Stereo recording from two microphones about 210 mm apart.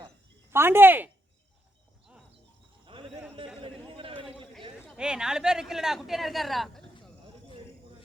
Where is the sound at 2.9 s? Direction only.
25° right (ahead or behind).